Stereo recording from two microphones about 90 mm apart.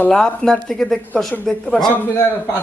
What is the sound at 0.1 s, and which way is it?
A man's voice, 5° left (ahead or behind).